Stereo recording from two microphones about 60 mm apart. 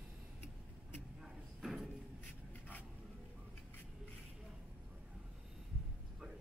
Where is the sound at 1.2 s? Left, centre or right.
Centre.